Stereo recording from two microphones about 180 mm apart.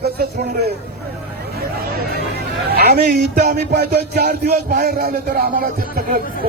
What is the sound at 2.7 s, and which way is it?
Speech, 60° right (ahead or behind).